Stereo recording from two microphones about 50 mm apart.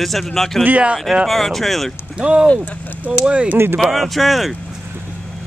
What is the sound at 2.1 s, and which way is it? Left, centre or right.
Speech, right.